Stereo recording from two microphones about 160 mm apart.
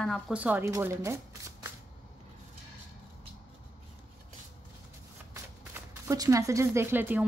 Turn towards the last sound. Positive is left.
turn(degrees=-10)  # may be behind; listen again after turning